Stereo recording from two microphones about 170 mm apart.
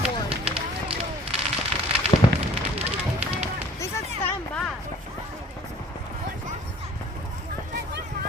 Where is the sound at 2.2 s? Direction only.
25° left (ahead or behind).